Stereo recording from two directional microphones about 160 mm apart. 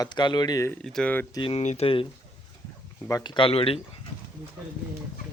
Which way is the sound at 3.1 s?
30° left (ahead or behind).